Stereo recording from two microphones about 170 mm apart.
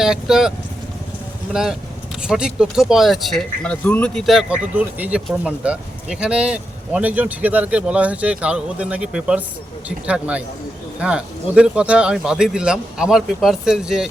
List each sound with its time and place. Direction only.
0.0 s speech: 5° right (ahead or behind)
2.2 s speech: 5° right (ahead or behind)